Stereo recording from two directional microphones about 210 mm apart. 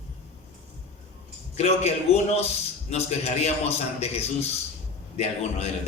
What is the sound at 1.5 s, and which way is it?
A man's voice, 30° left (ahead or behind).